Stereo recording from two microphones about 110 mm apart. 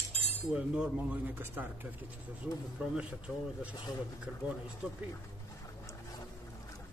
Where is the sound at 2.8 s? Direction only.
10° right (ahead or behind).